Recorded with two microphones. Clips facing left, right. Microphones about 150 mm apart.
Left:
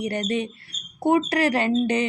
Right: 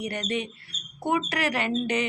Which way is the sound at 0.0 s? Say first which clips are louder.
Left 5 dB; 30° left (ahead or behind).